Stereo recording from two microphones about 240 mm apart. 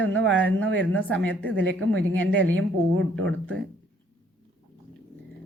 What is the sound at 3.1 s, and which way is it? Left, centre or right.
Speech, right.